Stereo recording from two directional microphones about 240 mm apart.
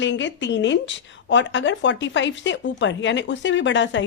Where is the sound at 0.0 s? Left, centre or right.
Left.